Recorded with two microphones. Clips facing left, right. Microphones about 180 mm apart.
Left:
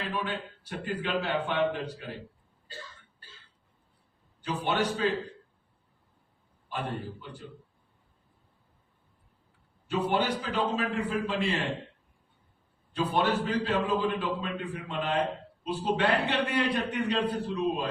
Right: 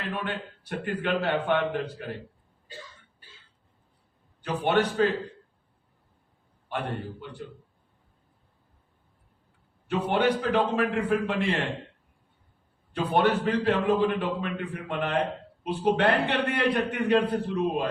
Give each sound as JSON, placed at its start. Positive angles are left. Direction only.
{"t": 0.1, "sound": "a man's voice", "side_deg": -60}
{"t": 4.4, "sound": "a man's voice", "side_deg": -60}
{"t": 6.7, "sound": "a man's voice", "side_deg": -60}
{"t": 9.9, "sound": "a man's voice", "side_deg": -60}
{"t": 12.9, "sound": "a man's voice", "side_deg": -60}